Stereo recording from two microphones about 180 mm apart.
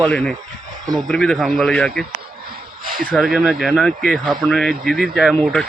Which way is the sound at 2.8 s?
50° right (ahead or behind).